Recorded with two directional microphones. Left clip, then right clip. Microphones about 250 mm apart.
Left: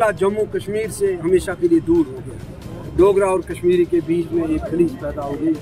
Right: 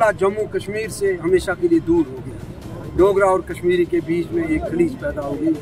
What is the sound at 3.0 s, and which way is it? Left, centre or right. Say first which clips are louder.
Speech: even; centre.